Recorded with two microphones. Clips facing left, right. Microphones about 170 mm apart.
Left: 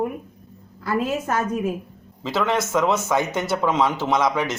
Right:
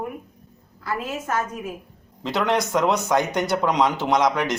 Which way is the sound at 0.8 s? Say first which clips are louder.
Left 5 dB; 35° left (ahead or behind).